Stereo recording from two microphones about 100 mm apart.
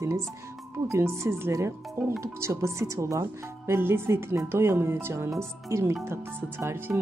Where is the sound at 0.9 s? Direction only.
30° right (ahead or behind).